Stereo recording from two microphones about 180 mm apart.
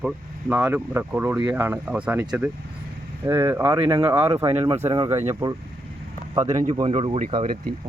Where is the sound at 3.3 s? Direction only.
15° right (ahead or behind).